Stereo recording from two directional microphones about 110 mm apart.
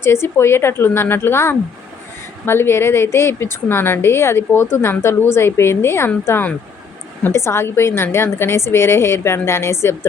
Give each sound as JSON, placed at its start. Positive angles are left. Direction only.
{"t": 0.0, "sound": "a woman's voice", "side_deg": 25}